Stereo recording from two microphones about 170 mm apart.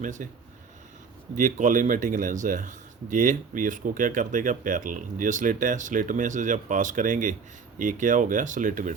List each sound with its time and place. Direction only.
0.0 s speech: 50° right (ahead or behind)
1.4 s speech: 50° right (ahead or behind)